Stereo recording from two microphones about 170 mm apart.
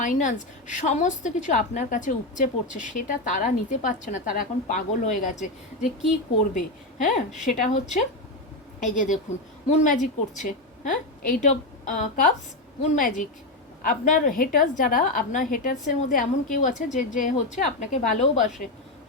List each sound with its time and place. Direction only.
0.0 s a woman's voice: 50° left (ahead or behind)